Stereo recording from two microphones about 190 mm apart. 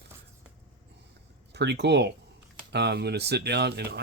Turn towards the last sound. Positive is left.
turn(degrees=-60)  # may be behind; listen again after turning